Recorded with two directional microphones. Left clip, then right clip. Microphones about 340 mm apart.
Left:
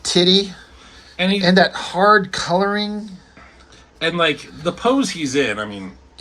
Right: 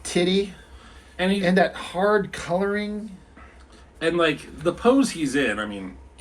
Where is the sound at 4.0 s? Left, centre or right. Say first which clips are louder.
Left 3 dB; left.